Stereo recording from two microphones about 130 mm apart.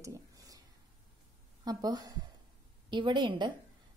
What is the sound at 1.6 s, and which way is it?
A woman's voice, 30° right (ahead or behind).